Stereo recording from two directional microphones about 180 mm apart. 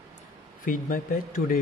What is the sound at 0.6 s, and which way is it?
Speech, 50° left (ahead or behind).